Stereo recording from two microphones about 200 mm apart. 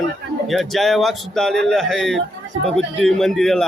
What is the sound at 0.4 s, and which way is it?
A man's voice, centre (ahead or behind).